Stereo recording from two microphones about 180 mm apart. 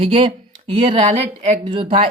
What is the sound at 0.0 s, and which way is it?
Speech, 30° right (ahead or behind).